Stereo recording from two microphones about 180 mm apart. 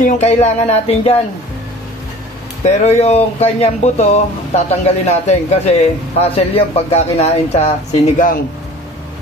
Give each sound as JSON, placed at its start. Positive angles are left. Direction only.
{"t": 0.0, "sound": "a man's voice", "side_deg": 35}
{"t": 2.6, "sound": "a man's voice", "side_deg": 40}